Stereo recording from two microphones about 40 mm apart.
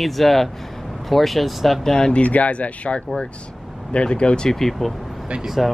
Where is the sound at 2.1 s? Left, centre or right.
Left.